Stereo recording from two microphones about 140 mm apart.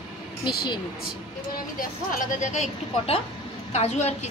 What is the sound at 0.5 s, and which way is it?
Speech, 30° left (ahead or behind).